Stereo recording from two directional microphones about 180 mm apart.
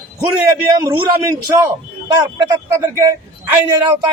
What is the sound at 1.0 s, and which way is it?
Speech, 20° right (ahead or behind).